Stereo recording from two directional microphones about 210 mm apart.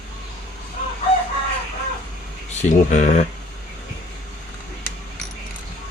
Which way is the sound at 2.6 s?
35° left (ahead or behind).